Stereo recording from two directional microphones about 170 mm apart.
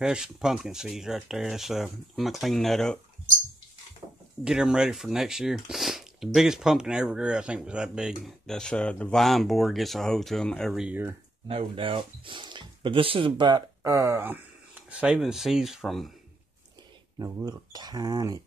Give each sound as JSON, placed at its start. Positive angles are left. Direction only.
{"t": 0.0, "sound": "speech", "side_deg": -5}
{"t": 4.0, "sound": "a sound", "side_deg": -25}
{"t": 4.5, "sound": "speech", "side_deg": -5}
{"t": 11.4, "sound": "speech", "side_deg": -35}
{"t": 17.2, "sound": "speech", "side_deg": -25}